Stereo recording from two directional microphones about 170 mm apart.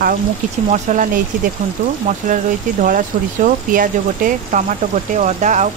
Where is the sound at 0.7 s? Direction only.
50° right (ahead or behind).